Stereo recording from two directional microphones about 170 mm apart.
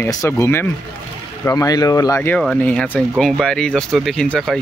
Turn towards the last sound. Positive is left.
turn(degrees=5)  # may be behind; listen again after turning